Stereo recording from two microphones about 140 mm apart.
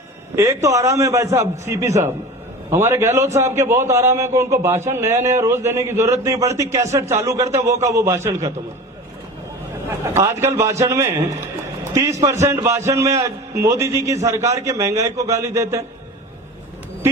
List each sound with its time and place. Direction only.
0.3 s speech: 20° right (ahead or behind)
9.9 s speech: 20° right (ahead or behind)